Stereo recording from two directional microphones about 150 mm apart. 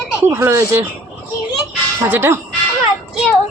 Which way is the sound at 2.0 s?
15° right (ahead or behind).